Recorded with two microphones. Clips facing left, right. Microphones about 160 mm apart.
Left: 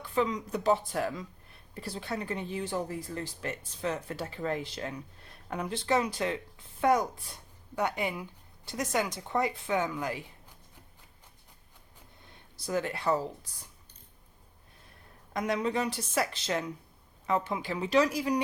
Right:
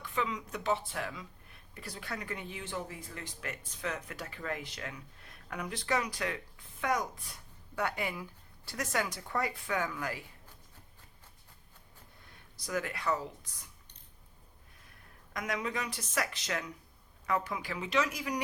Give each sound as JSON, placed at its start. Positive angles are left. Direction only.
{"t": 0.0, "sound": "speech", "side_deg": 35}
{"t": 1.7, "sound": "a woman's voice", "side_deg": 30}
{"t": 7.8, "sound": "a woman's voice", "side_deg": 20}
{"t": 12.5, "sound": "a woman's voice", "side_deg": 30}
{"t": 15.3, "sound": "a woman's voice", "side_deg": 30}